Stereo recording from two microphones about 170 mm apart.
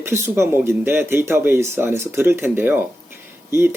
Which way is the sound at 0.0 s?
15° right (ahead or behind).